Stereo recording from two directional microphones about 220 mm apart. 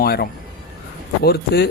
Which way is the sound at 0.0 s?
45° left (ahead or behind).